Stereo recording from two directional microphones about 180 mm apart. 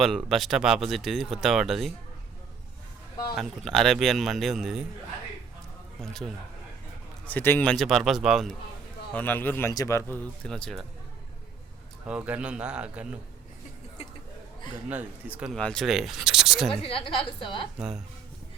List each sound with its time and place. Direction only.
0.0 s speech: centre (ahead or behind)
3.3 s speech: centre (ahead or behind)
6.0 s speech: centre (ahead or behind)
9.1 s speech: 10° left (ahead or behind)
12.0 s speech: 5° right (ahead or behind)
14.8 s speech: 10° right (ahead or behind)
15.5 s speech: 5° left (ahead or behind)
16.8 s a woman's voice: 30° left (ahead or behind)
17.7 s speech: 5° right (ahead or behind)